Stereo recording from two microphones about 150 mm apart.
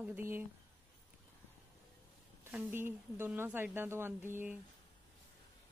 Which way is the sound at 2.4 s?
15° right (ahead or behind).